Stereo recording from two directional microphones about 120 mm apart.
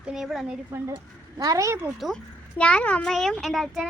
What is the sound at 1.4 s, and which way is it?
Speech, 30° right (ahead or behind).